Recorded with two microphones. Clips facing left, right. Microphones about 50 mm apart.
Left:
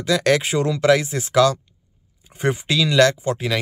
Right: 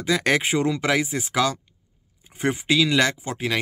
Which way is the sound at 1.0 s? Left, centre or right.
Centre.